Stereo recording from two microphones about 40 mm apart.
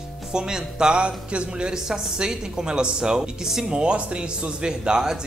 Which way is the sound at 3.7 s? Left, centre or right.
Right.